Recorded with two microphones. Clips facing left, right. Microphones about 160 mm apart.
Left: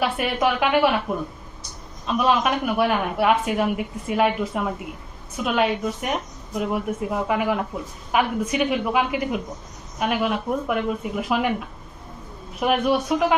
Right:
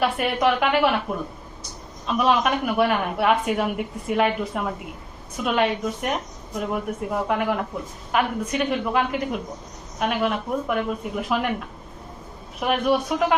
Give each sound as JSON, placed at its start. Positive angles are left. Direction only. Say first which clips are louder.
{"t": 0.0, "sound": "a woman's voice", "louder": "right 1 dB", "side_deg": 0}
{"t": 2.0, "sound": "a woman's voice", "louder": "even", "side_deg": 0}
{"t": 12.5, "sound": "a woman's voice", "louder": "left 1 dB", "side_deg": 0}